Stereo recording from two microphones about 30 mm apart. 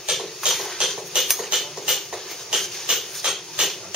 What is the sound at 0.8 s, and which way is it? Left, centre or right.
Music, right.